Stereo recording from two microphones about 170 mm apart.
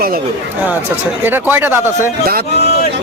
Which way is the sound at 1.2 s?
10° right (ahead or behind).